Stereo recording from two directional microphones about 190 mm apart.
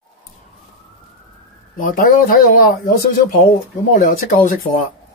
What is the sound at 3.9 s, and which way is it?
Speech, 45° left (ahead or behind).